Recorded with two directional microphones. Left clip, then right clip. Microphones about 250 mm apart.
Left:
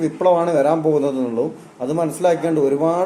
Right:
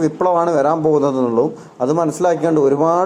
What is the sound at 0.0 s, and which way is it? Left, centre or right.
Speech, right.